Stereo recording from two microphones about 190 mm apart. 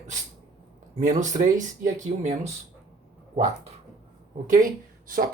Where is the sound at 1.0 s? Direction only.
40° right (ahead or behind).